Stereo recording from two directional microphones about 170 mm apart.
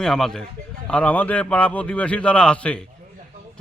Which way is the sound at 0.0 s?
5° left (ahead or behind).